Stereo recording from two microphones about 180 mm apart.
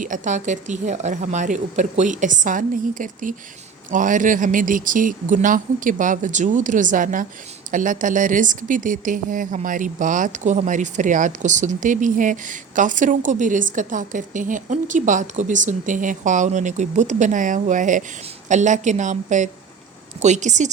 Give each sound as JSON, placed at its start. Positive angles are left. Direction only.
{"t": 0.0, "sound": "a woman's voice", "side_deg": -45}